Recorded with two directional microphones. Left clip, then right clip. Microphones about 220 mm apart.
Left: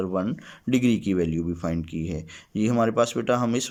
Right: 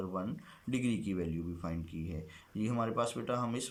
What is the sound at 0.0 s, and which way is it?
Speech, 45° left (ahead or behind).